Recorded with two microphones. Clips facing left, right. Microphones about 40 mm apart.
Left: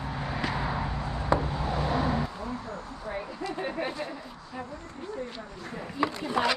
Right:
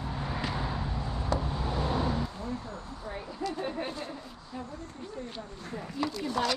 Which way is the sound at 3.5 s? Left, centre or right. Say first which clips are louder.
Left 5 dB; left.